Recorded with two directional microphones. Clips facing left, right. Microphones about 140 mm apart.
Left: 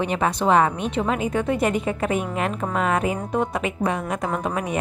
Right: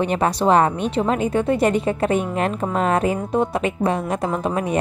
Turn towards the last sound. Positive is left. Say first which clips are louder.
# right 3 dB
turn(degrees=-30)  # may be behind; listen again after turning